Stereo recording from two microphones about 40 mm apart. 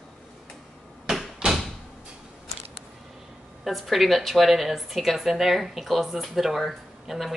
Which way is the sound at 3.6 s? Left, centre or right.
Centre.